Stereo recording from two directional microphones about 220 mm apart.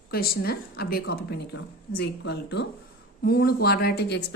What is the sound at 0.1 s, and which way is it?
Speech, 45° left (ahead or behind).